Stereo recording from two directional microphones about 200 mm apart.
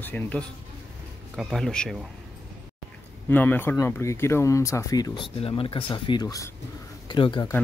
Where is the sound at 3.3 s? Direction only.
10° left (ahead or behind); by 7.5 s 25° left (ahead or behind).